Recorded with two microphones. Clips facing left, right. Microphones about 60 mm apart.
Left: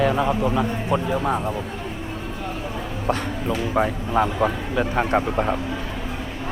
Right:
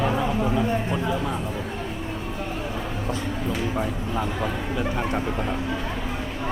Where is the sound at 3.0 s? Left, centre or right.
Left.